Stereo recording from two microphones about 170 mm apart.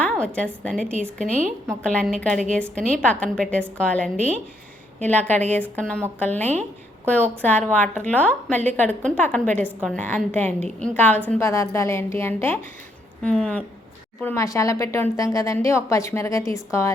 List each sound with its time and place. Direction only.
0.3 s a woman's voice: 5° left (ahead or behind)